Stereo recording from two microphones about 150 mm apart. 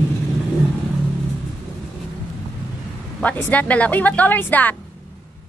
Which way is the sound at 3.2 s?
10° left (ahead or behind).